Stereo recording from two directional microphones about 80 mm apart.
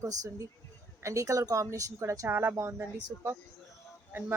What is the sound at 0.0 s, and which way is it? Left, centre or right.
Speech, right.